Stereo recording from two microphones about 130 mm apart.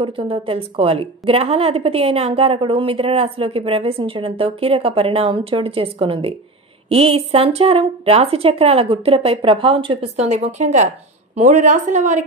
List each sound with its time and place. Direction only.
0.0 s a woman's voice: 45° right (ahead or behind)
10.2 s a woman's voice: 60° right (ahead or behind)